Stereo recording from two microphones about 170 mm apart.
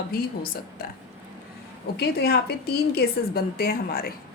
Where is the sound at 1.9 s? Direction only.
70° left (ahead or behind).